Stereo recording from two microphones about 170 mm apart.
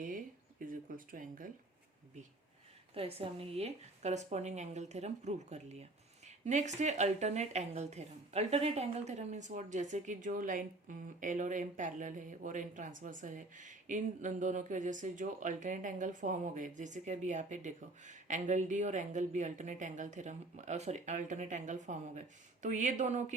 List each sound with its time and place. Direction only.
0.6 s speech: 55° right (ahead or behind)
2.9 s speech: 35° right (ahead or behind)